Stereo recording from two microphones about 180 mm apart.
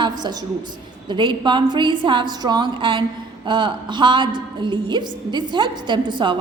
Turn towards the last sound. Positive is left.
turn(degrees=-25)  # may be behind; listen again after turning